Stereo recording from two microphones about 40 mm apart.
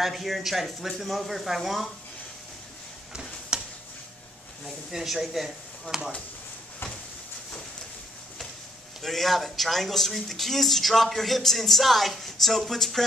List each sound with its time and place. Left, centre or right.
0.0 s speech: centre
3.1 s a sound: centre
4.9 s speech: centre
9.0 s speech: centre